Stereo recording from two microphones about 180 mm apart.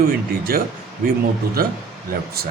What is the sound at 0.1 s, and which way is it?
Speech, 55° right (ahead or behind).